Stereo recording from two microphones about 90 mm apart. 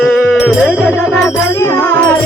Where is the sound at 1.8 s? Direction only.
15° left (ahead or behind).